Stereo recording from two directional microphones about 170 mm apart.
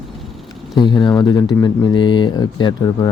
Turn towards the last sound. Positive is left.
turn(degrees=25)  # may be behind; listen again after turning